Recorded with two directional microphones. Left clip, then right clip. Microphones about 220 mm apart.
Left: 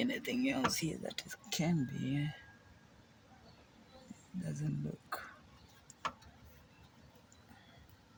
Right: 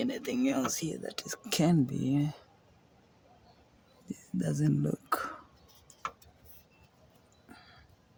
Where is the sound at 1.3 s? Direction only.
45° right (ahead or behind).